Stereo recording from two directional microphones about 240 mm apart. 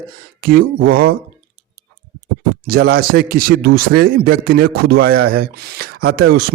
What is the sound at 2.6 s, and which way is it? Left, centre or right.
Speech, right.